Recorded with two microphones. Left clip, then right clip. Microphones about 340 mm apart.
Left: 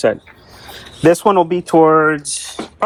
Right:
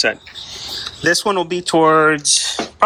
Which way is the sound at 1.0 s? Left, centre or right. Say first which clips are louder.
Left 5 dB; centre.